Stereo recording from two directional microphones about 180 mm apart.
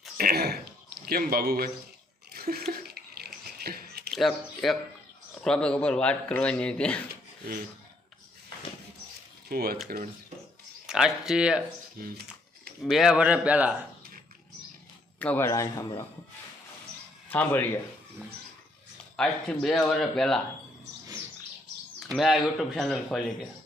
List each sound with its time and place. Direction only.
0.2 s speech: 60° right (ahead or behind)
2.3 s a sound: 60° right (ahead or behind)
3.2 s biting: 60° right (ahead or behind)
4.1 s speech: centre (ahead or behind)
9.5 s speech: 60° right (ahead or behind)
9.9 s speech: 45° right (ahead or behind)
10.8 s speech: 5° right (ahead or behind)
12.8 s speech: centre (ahead or behind)
15.2 s speech: 10° left (ahead or behind)
17.2 s speech: 10° left (ahead or behind)
19.1 s speech: 5° left (ahead or behind)
22.0 s speech: centre (ahead or behind)